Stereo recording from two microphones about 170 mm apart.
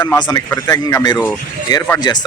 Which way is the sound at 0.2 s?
20° left (ahead or behind).